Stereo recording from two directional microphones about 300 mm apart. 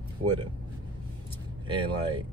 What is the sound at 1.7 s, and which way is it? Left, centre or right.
Speech, centre.